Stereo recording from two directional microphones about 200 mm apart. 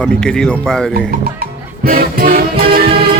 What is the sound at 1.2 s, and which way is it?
Music, 50° right (ahead or behind).